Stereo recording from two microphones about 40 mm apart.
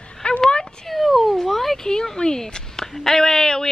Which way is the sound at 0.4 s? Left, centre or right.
Left.